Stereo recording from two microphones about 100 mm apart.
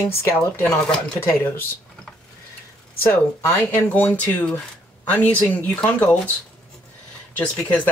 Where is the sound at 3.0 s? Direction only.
20° left (ahead or behind).